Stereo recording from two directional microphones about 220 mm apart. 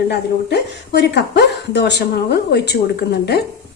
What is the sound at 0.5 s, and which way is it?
A woman's voice, 50° left (ahead or behind).